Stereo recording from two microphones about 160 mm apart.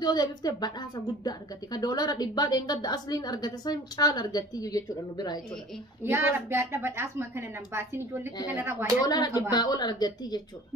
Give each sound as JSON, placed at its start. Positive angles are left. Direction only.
{"t": 0.0, "sound": "a woman's voice", "side_deg": 25}
{"t": 6.0, "sound": "a woman's voice", "side_deg": -15}
{"t": 9.0, "sound": "a woman's voice", "side_deg": 25}